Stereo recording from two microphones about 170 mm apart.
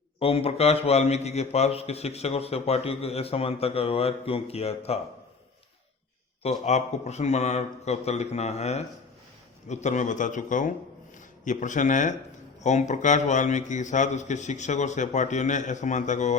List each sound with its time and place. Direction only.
0.2 s a man's voice: 35° left (ahead or behind)
6.4 s a man's voice: 40° left (ahead or behind)